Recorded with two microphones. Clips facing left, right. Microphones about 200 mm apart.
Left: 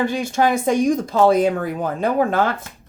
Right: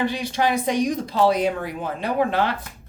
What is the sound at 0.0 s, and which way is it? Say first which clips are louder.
Speech: left 4 dB; 45° left (ahead or behind).